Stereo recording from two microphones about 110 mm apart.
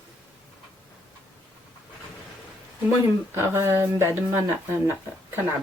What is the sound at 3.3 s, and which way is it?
Speech, 20° right (ahead or behind).